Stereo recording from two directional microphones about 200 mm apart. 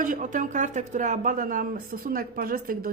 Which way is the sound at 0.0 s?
40° right (ahead or behind).